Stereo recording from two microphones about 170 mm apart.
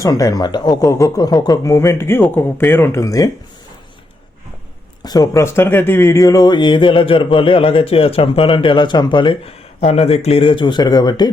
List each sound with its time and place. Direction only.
0.0 s speech: 20° left (ahead or behind)
5.0 s speech: 25° left (ahead or behind)